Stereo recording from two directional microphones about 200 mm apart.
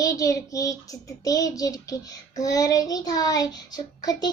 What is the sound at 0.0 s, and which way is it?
Child singing, 15° left (ahead or behind).